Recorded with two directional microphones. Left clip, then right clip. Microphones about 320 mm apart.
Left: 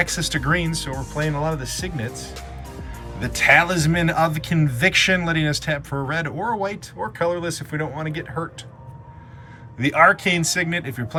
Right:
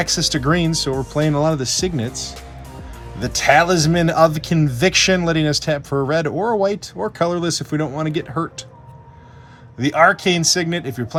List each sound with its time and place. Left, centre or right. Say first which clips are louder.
0.0 s speech: right 3 dB; centre
9.7 s speech: right 1 dB; centre